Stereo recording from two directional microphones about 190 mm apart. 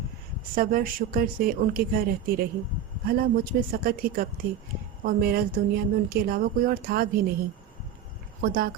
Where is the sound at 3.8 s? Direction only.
50° right (ahead or behind).